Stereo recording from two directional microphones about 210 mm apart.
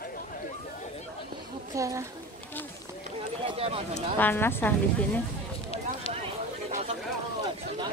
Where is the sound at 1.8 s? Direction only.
15° right (ahead or behind).